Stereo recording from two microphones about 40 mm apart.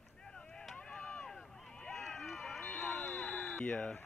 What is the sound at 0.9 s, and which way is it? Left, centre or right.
Run, centre.